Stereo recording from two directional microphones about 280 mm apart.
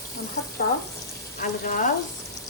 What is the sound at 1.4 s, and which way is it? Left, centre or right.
Speech, left.